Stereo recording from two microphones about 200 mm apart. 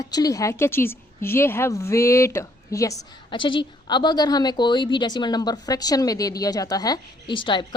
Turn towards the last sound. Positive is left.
turn(degrees=25)  # may be behind; listen again after turning